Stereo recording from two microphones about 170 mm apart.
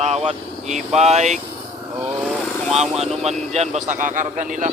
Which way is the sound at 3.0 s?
40° right (ahead or behind).